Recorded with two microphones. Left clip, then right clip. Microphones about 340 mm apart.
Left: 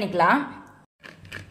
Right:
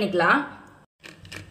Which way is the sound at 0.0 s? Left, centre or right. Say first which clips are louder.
Even; centre.